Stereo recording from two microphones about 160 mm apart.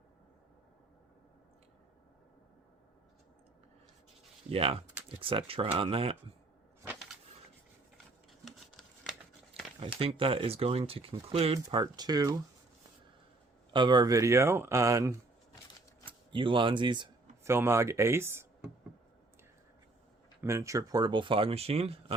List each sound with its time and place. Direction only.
4.5 s speech: 35° right (ahead or behind)
8.4 s scissors: centre (ahead or behind)
9.8 s speech: 35° right (ahead or behind)
11.8 s speech: 25° right (ahead or behind)
13.7 s speech: 30° right (ahead or behind)
16.3 s speech: 30° right (ahead or behind)
17.4 s speech: 15° right (ahead or behind)
20.4 s speech: 15° right (ahead or behind); by 21.9 s 40° right (ahead or behind)